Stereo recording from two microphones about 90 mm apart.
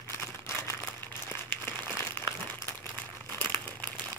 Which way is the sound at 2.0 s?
25° left (ahead or behind).